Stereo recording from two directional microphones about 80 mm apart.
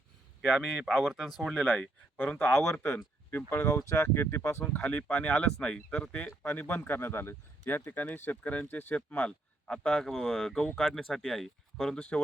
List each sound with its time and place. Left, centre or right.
0.4 s speech: centre
2.4 s speech: left
4.6 s speech: centre
6.4 s speech: left; by 10.6 s centre
10.6 s speech: centre
10.8 s speech: centre
11.9 s speech: centre